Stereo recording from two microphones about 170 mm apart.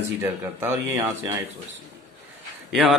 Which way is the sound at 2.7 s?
Centre (ahead or behind).